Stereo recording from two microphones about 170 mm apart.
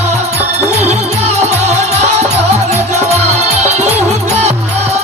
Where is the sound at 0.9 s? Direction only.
40° right (ahead or behind).